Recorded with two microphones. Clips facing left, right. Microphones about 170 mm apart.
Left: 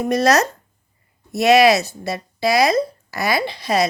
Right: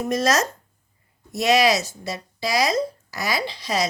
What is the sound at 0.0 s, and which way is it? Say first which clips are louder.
Speech: left 5 dB; 60° left (ahead or behind).